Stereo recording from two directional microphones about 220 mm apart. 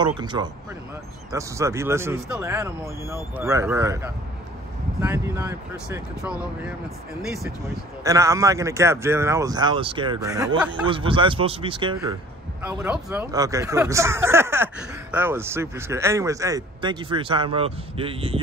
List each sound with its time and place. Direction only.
0.0 s speech: 20° right (ahead or behind)
12.6 s speech: 5° right (ahead or behind); by 18.4 s 25° right (ahead or behind)